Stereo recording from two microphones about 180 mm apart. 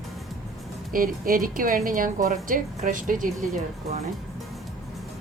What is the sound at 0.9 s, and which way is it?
A woman's voice, 50° right (ahead or behind).